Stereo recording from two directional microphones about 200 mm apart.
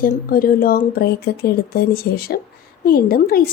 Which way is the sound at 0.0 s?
45° left (ahead or behind).